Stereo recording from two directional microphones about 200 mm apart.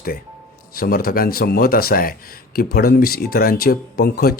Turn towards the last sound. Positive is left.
turn(degrees=50)  # may be behind; listen again after turning